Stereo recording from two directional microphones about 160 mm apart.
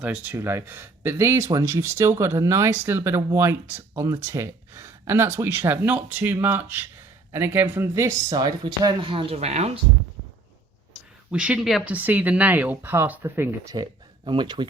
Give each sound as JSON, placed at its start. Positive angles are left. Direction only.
{"t": 0.0, "sound": "speech", "side_deg": -10}
{"t": 11.3, "sound": "speech", "side_deg": -5}
{"t": 14.3, "sound": "speech", "side_deg": -30}